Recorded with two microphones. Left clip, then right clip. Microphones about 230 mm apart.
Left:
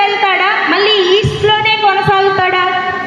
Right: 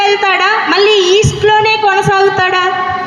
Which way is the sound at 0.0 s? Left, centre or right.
Right.